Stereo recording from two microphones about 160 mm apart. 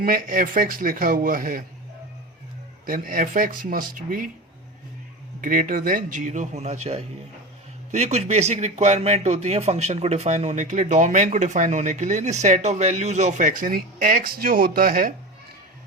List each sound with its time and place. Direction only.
0.0 s speech: 60° right (ahead or behind)
2.8 s speech: 60° right (ahead or behind)
5.4 s speech: 55° right (ahead or behind)